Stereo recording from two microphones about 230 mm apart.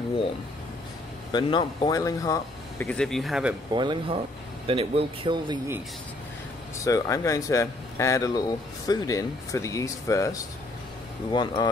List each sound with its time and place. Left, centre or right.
1.3 s speech: left; by 3.5 s centre
3.7 s speech: centre
6.8 s speech: centre